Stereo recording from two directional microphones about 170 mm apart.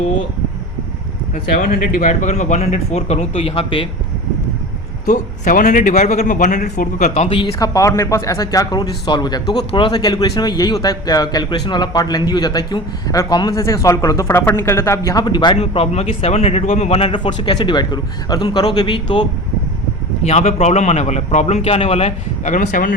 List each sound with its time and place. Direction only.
1.5 s a man's voice: 50° left (ahead or behind); by 3.8 s 35° left (ahead or behind)
5.0 s a man's voice: 50° left (ahead or behind)